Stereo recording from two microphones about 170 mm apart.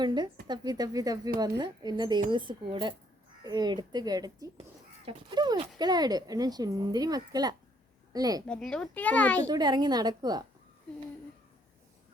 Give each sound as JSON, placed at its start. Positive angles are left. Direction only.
{"t": 0.0, "sound": "speech", "side_deg": -25}
{"t": 8.4, "sound": "a child's voice", "side_deg": 5}
{"t": 9.5, "sound": "speech", "side_deg": -25}